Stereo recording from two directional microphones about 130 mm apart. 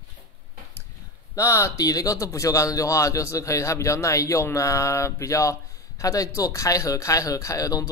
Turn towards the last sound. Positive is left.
turn(degrees=25)  # may be behind; listen again after turning